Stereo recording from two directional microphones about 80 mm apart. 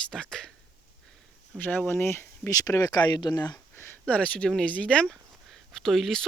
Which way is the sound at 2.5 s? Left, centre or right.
Left.